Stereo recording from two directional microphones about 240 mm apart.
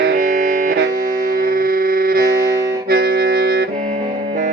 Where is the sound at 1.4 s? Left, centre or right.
Right.